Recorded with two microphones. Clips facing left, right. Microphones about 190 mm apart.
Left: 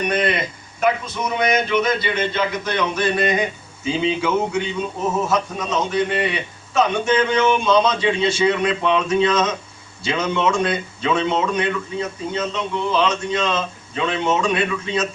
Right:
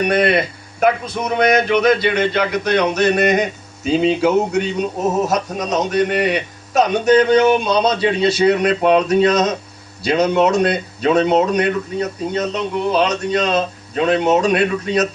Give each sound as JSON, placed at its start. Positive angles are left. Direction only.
{"t": 0.0, "sound": "a man's voice", "side_deg": -65}
{"t": 2.8, "sound": "a sound", "side_deg": -40}
{"t": 3.4, "sound": "a man's voice", "side_deg": -40}